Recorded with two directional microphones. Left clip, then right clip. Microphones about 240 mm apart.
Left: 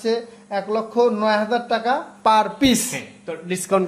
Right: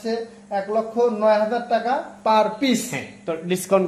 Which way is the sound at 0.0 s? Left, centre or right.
Left.